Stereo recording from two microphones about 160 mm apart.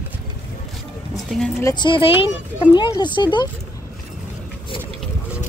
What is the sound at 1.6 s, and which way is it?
Speech, 20° left (ahead or behind).